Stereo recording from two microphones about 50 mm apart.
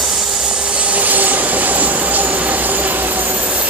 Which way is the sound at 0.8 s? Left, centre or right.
Right.